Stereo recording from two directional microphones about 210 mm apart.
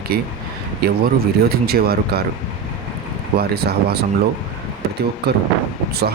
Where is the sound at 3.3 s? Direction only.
50° right (ahead or behind).